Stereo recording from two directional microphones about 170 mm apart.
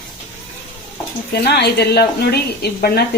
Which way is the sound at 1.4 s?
70° left (ahead or behind).